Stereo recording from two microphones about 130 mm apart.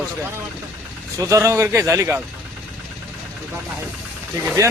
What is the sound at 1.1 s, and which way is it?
Speech, 25° right (ahead or behind).